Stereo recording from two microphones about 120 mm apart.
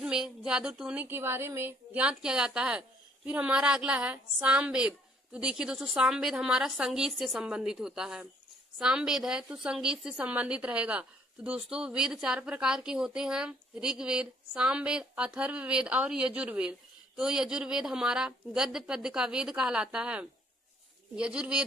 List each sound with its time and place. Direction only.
0.0 s a woman's voice: 5° right (ahead or behind)